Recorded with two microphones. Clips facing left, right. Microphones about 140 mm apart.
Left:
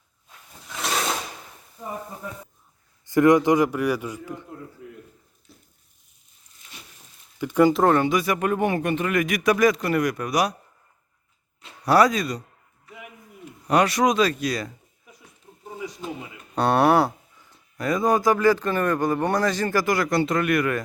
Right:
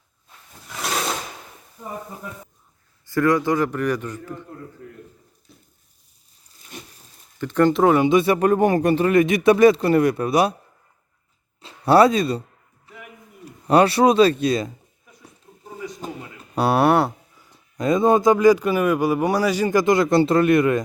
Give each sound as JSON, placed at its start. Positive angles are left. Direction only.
{"t": 0.6, "sound": "wild animals", "side_deg": 0}
{"t": 3.1, "sound": "a man's voice", "side_deg": 20}
{"t": 5.5, "sound": "a sound", "side_deg": 0}
{"t": 6.7, "sound": "a sound", "side_deg": -50}
{"t": 7.3, "sound": "a man's voice", "side_deg": 10}
{"t": 8.1, "sound": "speech", "side_deg": -30}
{"t": 11.6, "sound": "speech", "side_deg": -30}
{"t": 13.4, "sound": "speech", "side_deg": -30}
{"t": 16.0, "sound": "speech", "side_deg": -40}
{"t": 16.6, "sound": "speech", "side_deg": -5}
{"t": 17.3, "sound": "speech", "side_deg": -10}